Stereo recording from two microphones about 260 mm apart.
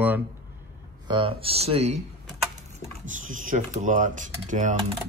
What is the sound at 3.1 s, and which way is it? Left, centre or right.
Speech, right.